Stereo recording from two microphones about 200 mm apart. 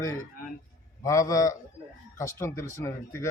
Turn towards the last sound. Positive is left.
turn(degrees=15)  # may be behind; listen again after turning